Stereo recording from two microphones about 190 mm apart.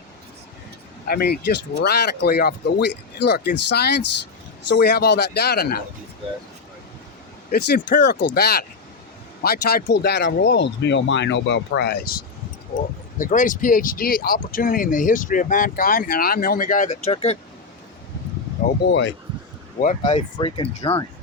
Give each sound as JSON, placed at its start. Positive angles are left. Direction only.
{"t": 1.0, "sound": "speech", "side_deg": 55}
{"t": 7.5, "sound": "speech", "side_deg": 60}
{"t": 13.1, "sound": "speech", "side_deg": 45}
{"t": 18.9, "sound": "speech", "side_deg": 70}
{"t": 19.8, "sound": "speech", "side_deg": 40}